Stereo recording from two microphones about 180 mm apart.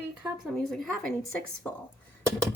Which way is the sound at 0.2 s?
Centre (ahead or behind).